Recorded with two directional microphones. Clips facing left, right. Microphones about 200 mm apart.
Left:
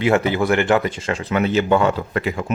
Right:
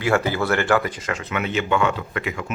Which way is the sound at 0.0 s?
20° left (ahead or behind).